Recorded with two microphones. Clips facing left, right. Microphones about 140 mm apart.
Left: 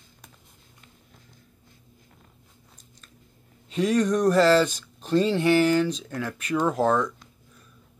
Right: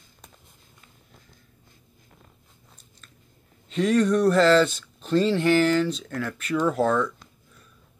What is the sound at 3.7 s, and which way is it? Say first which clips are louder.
Speech: right 2 dB; 10° left (ahead or behind).